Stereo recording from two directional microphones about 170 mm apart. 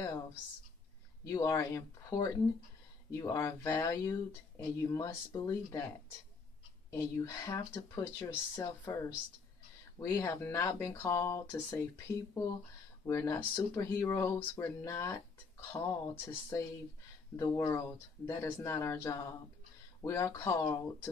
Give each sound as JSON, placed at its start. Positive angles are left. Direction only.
{"t": 0.0, "sound": "speech", "side_deg": 20}
{"t": 6.9, "sound": "speech", "side_deg": 20}
{"t": 13.0, "sound": "speech", "side_deg": 15}